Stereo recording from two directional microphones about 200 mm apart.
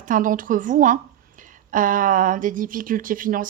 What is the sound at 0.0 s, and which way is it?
Speech, 40° right (ahead or behind).